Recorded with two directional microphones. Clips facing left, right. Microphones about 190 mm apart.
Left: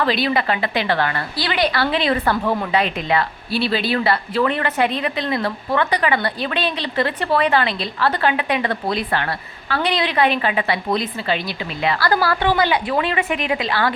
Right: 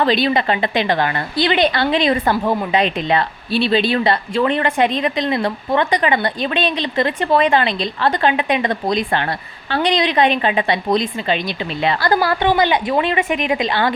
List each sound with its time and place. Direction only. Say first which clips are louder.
0.0 s a woman's voice: right 3 dB; 25° right (ahead or behind)